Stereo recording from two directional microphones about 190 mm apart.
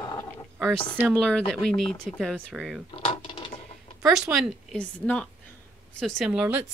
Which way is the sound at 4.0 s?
Centre (ahead or behind).